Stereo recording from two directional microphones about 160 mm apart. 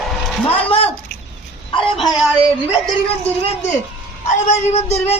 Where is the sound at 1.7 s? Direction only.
30° left (ahead or behind).